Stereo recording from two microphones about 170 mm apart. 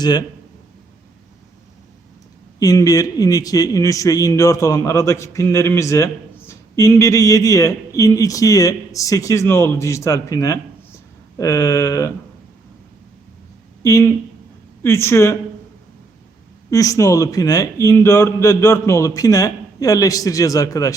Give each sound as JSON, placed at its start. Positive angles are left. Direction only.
{"t": 0.0, "sound": "a man's voice", "side_deg": 25}
{"t": 2.6, "sound": "a man's voice", "side_deg": 20}
{"t": 13.8, "sound": "a man's voice", "side_deg": 20}
{"t": 16.6, "sound": "a man's voice", "side_deg": 20}